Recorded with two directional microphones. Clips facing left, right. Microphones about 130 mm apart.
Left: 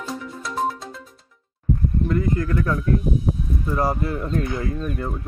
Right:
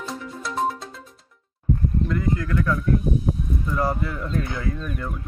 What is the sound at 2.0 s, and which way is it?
Speech, 40° left (ahead or behind).